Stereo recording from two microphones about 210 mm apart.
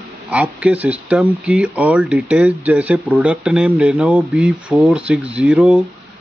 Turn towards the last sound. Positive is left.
turn(degrees=-5)  # may be behind; listen again after turning